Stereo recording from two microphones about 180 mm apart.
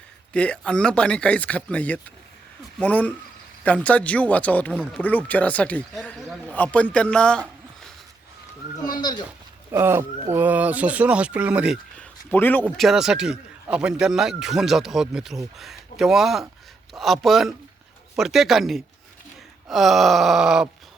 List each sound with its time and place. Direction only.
0.3 s a man's voice: 5° left (ahead or behind)
9.0 s speech: 25° left (ahead or behind)
9.7 s speech: 15° right (ahead or behind)
11.9 s speech: 10° left (ahead or behind)
12.6 s speech: centre (ahead or behind)